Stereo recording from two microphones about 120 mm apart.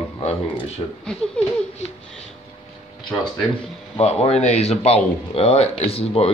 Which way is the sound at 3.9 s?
60° left (ahead or behind).